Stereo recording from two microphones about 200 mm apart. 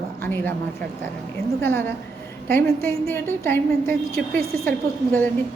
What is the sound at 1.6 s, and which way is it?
A woman's voice, 10° left (ahead or behind).